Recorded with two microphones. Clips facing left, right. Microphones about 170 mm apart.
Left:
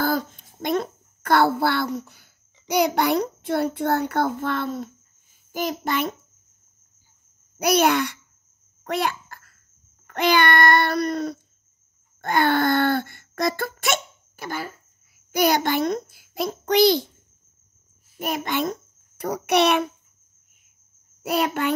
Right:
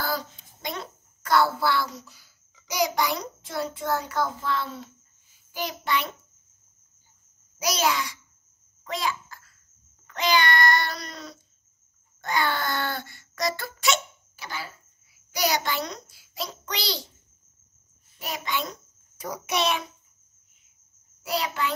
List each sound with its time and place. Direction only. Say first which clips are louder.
0.0 s a child's voice: left 7 dB; 50° left (ahead or behind)
7.5 s a child's voice: left 7 dB; 60° left (ahead or behind)
8.8 s babbling: left 5 dB; 60° left (ahead or behind)
10.0 s a child's voice: left 4 dB; 55° left (ahead or behind)
18.1 s a child's voice: left 6 dB; 50° left (ahead or behind)
21.2 s a child's voice: left 5 dB; 55° left (ahead or behind)